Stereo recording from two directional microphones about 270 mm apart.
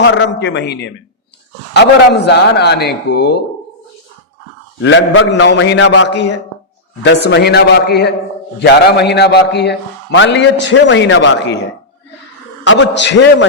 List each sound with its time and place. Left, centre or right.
0.0 s a man's voice: left
4.8 s a man's voice: left
12.6 s a man's voice: left